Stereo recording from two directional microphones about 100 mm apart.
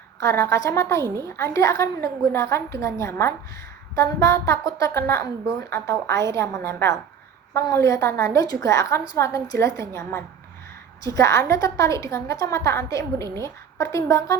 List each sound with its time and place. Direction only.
0.2 s a woman's voice: 30° left (ahead or behind)
1.0 s a woman's voice: 35° right (ahead or behind)
1.4 s a woman's voice: 30° left (ahead or behind)